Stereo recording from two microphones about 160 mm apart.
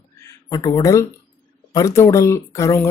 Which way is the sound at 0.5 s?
20° left (ahead or behind).